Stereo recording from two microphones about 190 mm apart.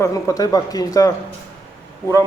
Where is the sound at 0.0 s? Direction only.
15° left (ahead or behind).